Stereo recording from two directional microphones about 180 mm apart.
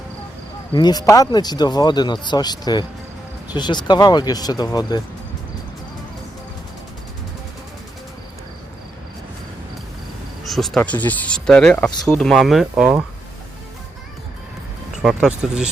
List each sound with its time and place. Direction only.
0.7 s speech: 25° left (ahead or behind)
10.4 s speech: centre (ahead or behind)
15.0 s speech: centre (ahead or behind)